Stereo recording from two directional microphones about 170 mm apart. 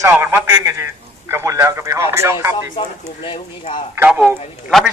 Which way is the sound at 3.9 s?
10° right (ahead or behind).